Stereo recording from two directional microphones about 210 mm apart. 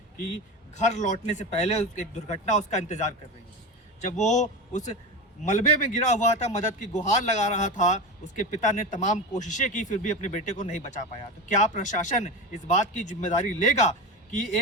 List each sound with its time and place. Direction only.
0.8 s a man's voice: 35° left (ahead or behind)